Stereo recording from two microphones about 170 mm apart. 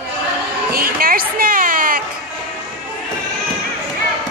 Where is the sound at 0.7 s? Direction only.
60° right (ahead or behind).